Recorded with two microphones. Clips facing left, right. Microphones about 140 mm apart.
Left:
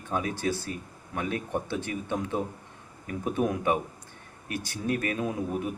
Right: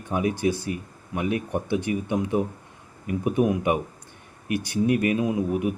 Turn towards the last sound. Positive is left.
turn(degrees=-10)  # may be behind; listen again after turning